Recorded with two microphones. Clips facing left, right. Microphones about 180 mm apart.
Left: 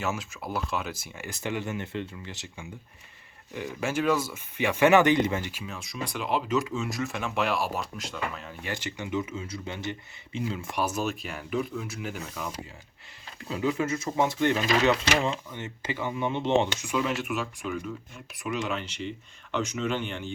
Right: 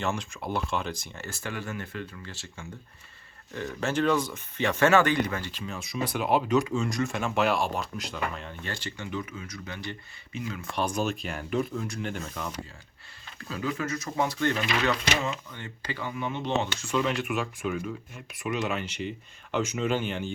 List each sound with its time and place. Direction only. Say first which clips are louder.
0.0 s speech: right 1 dB; 5° left (ahead or behind); by 5.5 s 20° left (ahead or behind)
5.5 s speech: right 2 dB; 5° left (ahead or behind)
6.1 s speech: right 3 dB; 55° right (ahead or behind)
6.5 s speech: right 3 dB; centre (ahead or behind)
8.6 s speech: left 4 dB; 20° left (ahead or behind)
10.8 s speech: right 2 dB; 5° left (ahead or behind)
13.4 s speech: left 4 dB; 20° left (ahead or behind)
16.9 s speech: right 3 dB; centre (ahead or behind)
19.9 s speech: right 2 dB; 40° right (ahead or behind)